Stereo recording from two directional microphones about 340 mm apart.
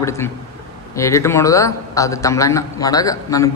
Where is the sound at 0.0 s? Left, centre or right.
Centre.